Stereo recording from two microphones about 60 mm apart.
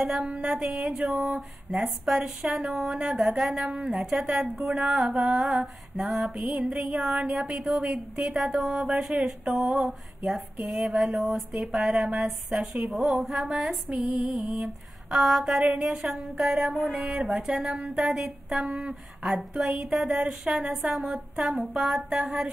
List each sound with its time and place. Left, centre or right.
0.2 s speech: centre
0.6 s speech: centre
3.9 s a sound: centre
7.7 s speech: centre
10.7 s a sound: centre
12.7 s speech: centre
19.5 s speech: centre
19.8 s speech: centre
20.8 s a sound: centre
22.2 s speech: centre